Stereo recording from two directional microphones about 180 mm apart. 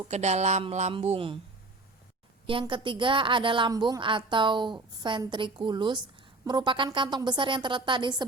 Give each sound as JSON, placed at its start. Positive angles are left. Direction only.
{"t": 0.1, "sound": "a woman's voice", "side_deg": -40}
{"t": 2.5, "sound": "a woman's voice", "side_deg": -30}